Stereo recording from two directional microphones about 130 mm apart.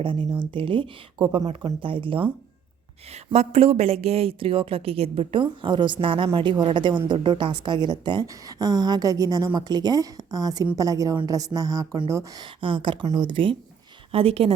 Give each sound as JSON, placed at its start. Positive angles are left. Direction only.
{"t": 0.0, "sound": "a woman's voice", "side_deg": -40}
{"t": 3.3, "sound": "a woman's voice", "side_deg": -50}
{"t": 12.4, "sound": "a woman's voice", "side_deg": -40}